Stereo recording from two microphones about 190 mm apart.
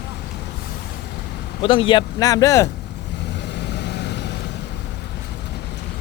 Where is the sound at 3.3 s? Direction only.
65° left (ahead or behind).